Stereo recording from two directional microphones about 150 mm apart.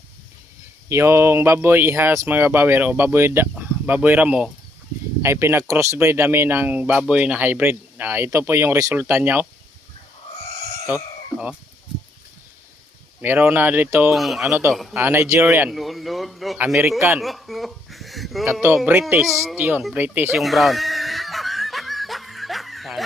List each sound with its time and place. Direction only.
0.9 s speech: 20° right (ahead or behind)
10.8 s chicken: 10° right (ahead or behind)
13.2 s speech: 15° right (ahead or behind)
14.2 s a man's voice: centre (ahead or behind)
14.5 s speech: 15° right (ahead or behind)
15.7 s a man's voice: centre (ahead or behind)
17.2 s a sound: centre (ahead or behind)
19.1 s a man's voice: centre (ahead or behind)
19.5 s speech: 10° right (ahead or behind)
20.3 s snicker: centre (ahead or behind)